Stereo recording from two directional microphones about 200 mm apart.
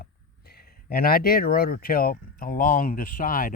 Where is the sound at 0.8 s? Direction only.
50° left (ahead or behind).